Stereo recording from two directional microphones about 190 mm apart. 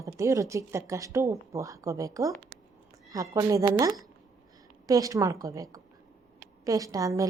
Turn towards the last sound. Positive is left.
turn(degrees=-15)  # may be behind; listen again after turning